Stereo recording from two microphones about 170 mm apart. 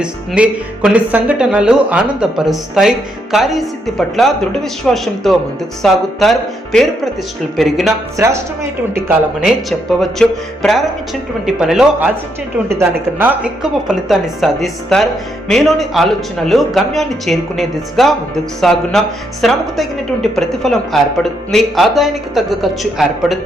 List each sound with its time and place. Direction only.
0.0 s a woman's voice: 5° right (ahead or behind)
7.5 s a woman's voice: centre (ahead or behind)
8.1 s speech: 15° right (ahead or behind)
9.4 s a woman's voice: centre (ahead or behind)
13.1 s a woman's voice: 10° right (ahead or behind)